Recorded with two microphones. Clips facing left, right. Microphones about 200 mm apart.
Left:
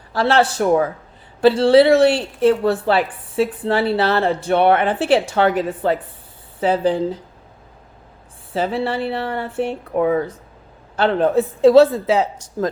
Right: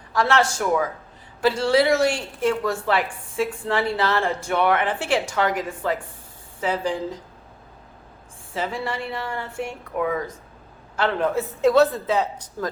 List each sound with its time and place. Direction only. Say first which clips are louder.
0.1 s speech: left 4 dB; 30° left (ahead or behind)
8.5 s speech: left 7 dB; 30° left (ahead or behind)